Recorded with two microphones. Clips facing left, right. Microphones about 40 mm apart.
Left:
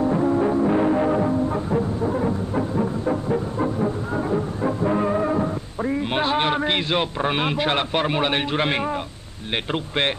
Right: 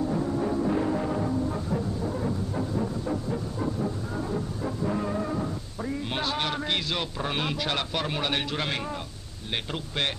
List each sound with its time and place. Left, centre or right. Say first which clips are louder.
0.0 s music: left 8 dB; left
9.7 s speech: left 8 dB; left